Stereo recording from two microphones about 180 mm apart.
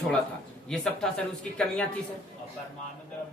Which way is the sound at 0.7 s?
5° left (ahead or behind).